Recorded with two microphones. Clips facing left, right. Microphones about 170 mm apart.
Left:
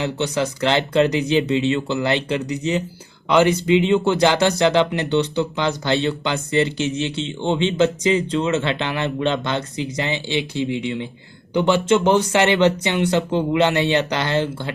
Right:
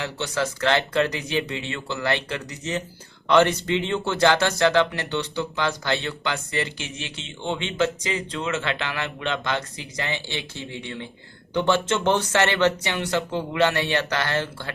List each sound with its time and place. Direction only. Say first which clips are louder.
0.0 s speech: left 5 dB; 20° left (ahead or behind)